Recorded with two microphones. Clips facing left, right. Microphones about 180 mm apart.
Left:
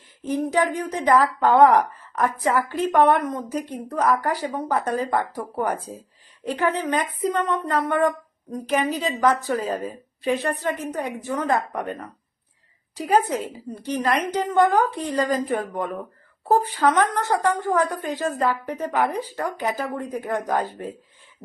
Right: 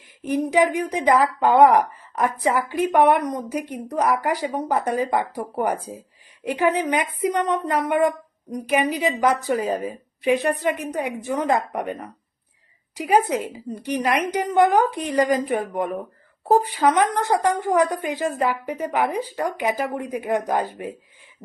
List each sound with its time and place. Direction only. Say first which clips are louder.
0.2 s speech: right 3 dB; 15° right (ahead or behind)